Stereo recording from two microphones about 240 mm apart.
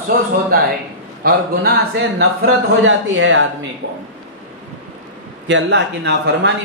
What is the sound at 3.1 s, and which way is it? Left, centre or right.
Speech, right.